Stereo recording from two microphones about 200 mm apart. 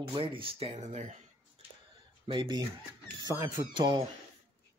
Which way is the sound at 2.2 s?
25° right (ahead or behind).